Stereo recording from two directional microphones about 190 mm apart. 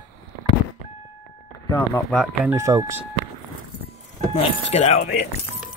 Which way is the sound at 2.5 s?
15° right (ahead or behind).